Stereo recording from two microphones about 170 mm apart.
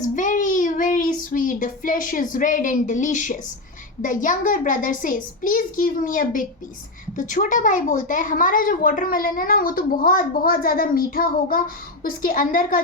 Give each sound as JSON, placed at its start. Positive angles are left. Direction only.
{"t": 0.0, "sound": "child singing", "side_deg": 50}
{"t": 4.0, "sound": "a child's voice", "side_deg": 50}